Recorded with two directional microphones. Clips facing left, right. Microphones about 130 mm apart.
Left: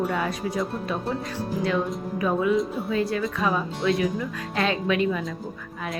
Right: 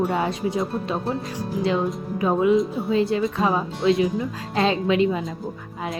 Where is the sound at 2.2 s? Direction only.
25° right (ahead or behind).